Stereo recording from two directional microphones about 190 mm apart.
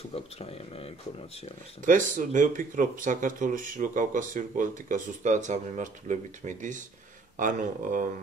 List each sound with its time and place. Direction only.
0.1 s speech: 30° left (ahead or behind)
1.9 s speech: 45° right (ahead or behind)